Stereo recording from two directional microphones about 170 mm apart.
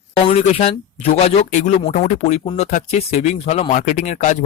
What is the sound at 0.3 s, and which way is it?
Speech, 35° left (ahead or behind).